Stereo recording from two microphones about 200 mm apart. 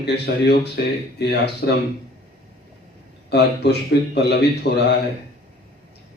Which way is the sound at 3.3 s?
55° left (ahead or behind).